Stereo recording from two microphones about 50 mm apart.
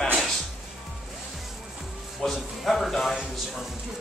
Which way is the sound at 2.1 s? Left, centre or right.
Centre.